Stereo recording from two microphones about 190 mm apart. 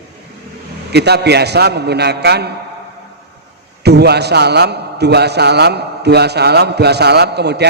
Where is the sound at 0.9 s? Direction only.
60° right (ahead or behind).